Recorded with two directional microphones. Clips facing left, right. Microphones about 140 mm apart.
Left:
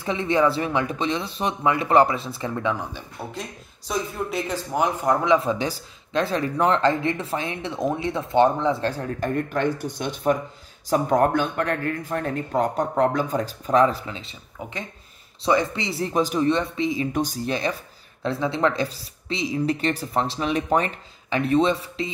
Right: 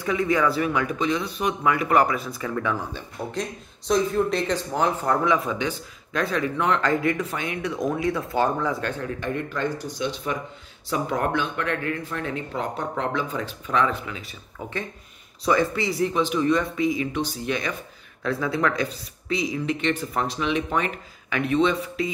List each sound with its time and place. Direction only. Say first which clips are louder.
0.0 s speech: left 1 dB; 25° left (ahead or behind)
3.3 s speech: right 5 dB; 5° left (ahead or behind)
5.3 s speech: left 3 dB; 30° left (ahead or behind)
15.4 s speech: even; 20° left (ahead or behind)
17.1 s speech: left 2 dB; 45° left (ahead or behind)